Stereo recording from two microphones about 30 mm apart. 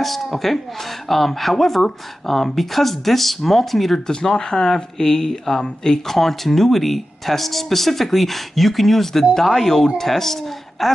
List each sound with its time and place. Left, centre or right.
1.0 s speech: centre
4.1 s speech: left; by 10.9 s centre